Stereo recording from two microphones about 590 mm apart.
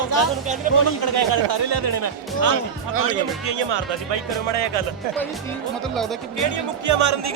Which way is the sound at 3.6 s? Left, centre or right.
Right.